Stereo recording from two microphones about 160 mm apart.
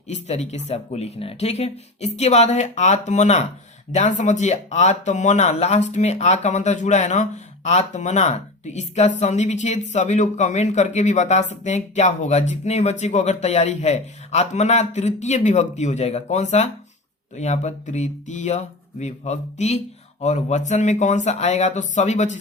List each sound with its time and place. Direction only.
0.1 s speech: 45° left (ahead or behind)